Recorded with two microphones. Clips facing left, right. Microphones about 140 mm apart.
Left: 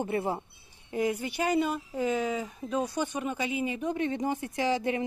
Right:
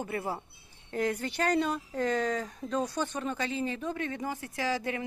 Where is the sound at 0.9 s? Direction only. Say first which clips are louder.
Left 1 dB; 10° left (ahead or behind).